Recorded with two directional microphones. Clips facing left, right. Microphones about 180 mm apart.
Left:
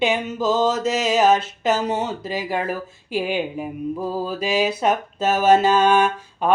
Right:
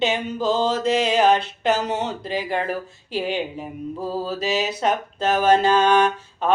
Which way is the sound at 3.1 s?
10° left (ahead or behind).